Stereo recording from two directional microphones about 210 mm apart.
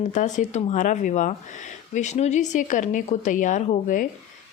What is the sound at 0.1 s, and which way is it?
Speech, 35° left (ahead or behind).